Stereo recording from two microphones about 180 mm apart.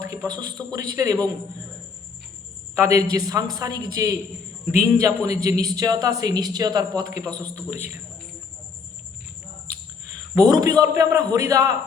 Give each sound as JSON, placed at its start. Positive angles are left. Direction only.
{"t": 0.3, "sound": "speech", "side_deg": -20}
{"t": 2.7, "sound": "a man's voice", "side_deg": -15}
{"t": 10.3, "sound": "speech", "side_deg": -20}